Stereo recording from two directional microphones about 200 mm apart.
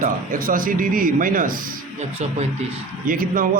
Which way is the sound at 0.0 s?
45° right (ahead or behind).